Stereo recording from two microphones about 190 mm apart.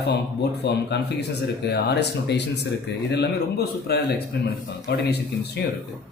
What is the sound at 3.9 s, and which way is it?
Speech, 55° left (ahead or behind).